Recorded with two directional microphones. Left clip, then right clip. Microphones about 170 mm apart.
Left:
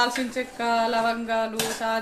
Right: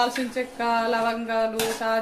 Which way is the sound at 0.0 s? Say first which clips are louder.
Even; 5° left (ahead or behind).